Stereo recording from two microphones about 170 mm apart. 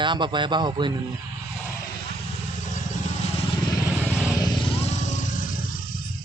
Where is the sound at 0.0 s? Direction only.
25° right (ahead or behind).